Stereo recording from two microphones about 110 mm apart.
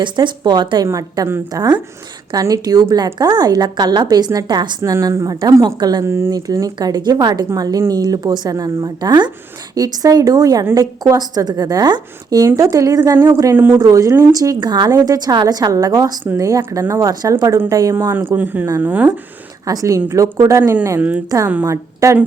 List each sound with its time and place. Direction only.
0.0 s speech: 45° right (ahead or behind)
4.8 s speech: 30° right (ahead or behind)
6.1 s speech: 25° right (ahead or behind)
6.3 s speech: 35° right (ahead or behind)
13.6 s speech: 20° right (ahead or behind)
13.8 s speech: 30° right (ahead or behind)
18.1 s speech: 20° right (ahead or behind)
19.6 s a woman's voice: 30° right (ahead or behind)